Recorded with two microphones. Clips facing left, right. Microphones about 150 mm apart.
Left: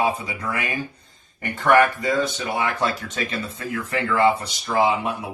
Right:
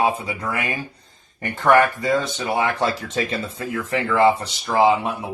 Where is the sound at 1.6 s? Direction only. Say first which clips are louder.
Right 1 dB; 30° right (ahead or behind).